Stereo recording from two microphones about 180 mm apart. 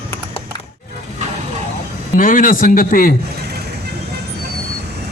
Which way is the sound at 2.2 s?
50° left (ahead or behind).